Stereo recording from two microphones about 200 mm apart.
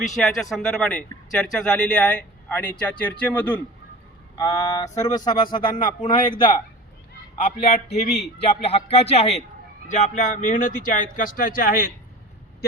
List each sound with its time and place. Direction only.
0.1 s speech: centre (ahead or behind); by 6.2 s 25° left (ahead or behind)
7.3 s speech: 30° left (ahead or behind); by 11.9 s 45° left (ahead or behind)